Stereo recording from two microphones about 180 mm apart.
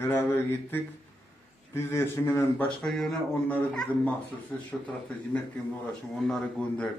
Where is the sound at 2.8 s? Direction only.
Centre (ahead or behind).